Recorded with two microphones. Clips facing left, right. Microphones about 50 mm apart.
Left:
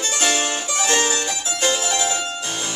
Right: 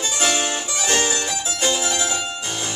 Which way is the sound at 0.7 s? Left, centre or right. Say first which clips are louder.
Left 3 dB; centre.